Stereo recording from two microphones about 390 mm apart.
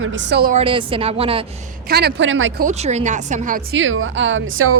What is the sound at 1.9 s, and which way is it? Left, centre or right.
Speech, right.